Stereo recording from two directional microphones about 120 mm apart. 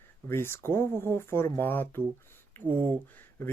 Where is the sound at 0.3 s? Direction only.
20° left (ahead or behind).